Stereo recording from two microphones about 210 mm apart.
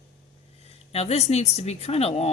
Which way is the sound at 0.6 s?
30° left (ahead or behind).